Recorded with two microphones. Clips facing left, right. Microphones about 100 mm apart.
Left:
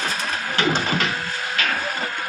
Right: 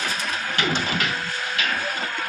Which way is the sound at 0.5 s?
35° left (ahead or behind).